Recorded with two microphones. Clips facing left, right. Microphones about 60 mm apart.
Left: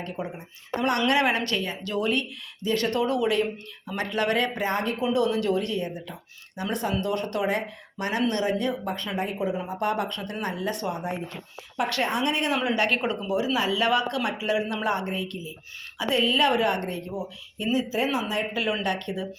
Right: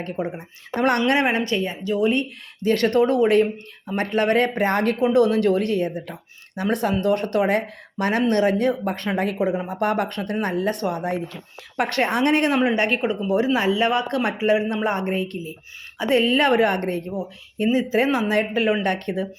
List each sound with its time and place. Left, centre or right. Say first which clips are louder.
0.0 s speech: right 6 dB; right
1.0 s speech: right 3 dB; right
2.6 s speech: right 6 dB; right
5.0 s speech: right 6 dB; right
9.1 s speech: right 6 dB; right
9.6 s speech: right 4 dB; right
10.9 s speech: right 6 dB; right
11.8 s speech: right 4 dB; right
12.1 s speech: right 6 dB; right
12.5 s speech: right 5 dB; right
12.9 s speech: right 4 dB; centre
13.2 s speech: right 5 dB; right
17.9 s speech: right 7 dB; right
18.5 s speech: right 6 dB; right